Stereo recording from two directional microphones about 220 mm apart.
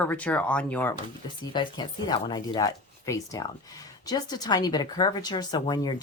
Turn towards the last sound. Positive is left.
turn(degrees=20)  # may be behind; listen again after turning